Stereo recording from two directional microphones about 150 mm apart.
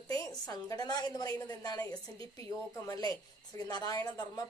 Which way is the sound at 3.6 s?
25° left (ahead or behind).